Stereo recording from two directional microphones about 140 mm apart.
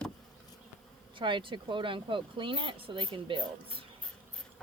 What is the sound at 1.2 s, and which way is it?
Speech, 35° right (ahead or behind).